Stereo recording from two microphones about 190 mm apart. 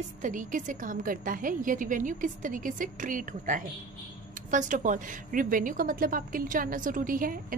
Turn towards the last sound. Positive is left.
turn(degrees=-45)  # may be behind; listen again after turning